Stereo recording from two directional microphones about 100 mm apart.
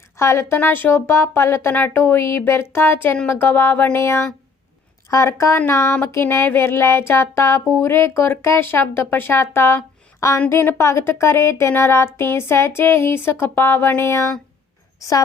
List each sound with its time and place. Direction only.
0.2 s a woman's voice: 30° left (ahead or behind)
0.5 s music: 20° left (ahead or behind)